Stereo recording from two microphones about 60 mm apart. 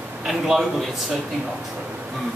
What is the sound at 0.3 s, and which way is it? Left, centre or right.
Speech, centre.